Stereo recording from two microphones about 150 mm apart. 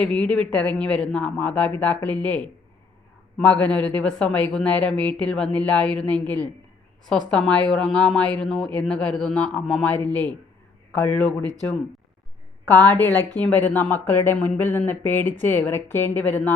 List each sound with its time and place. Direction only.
0.0 s a woman's voice: 5° left (ahead or behind)
12.8 s a woman's voice: 10° left (ahead or behind)
13.1 s speech: 25° right (ahead or behind)
13.4 s a woman's voice: 10° left (ahead or behind)